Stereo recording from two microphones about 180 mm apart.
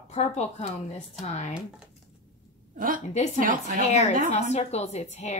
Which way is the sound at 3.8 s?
40° left (ahead or behind).